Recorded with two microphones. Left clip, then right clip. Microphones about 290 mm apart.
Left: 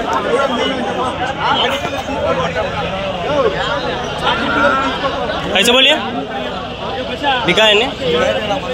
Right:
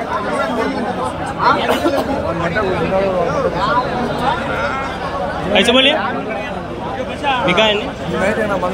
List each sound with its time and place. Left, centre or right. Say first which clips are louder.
5.5 s a man's voice: left 1 dB; centre
7.4 s a man's voice: left 3 dB; centre